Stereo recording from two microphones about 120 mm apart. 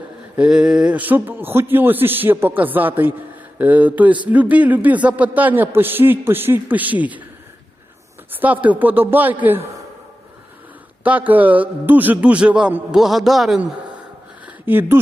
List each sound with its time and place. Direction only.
0.3 s a man's voice: 5° right (ahead or behind)
8.4 s a man's voice: 15° right (ahead or behind)
11.0 s a man's voice: 15° right (ahead or behind)
14.4 s a sound: 15° right (ahead or behind)